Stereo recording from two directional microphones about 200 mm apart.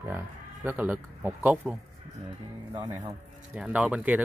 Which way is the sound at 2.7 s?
20° right (ahead or behind).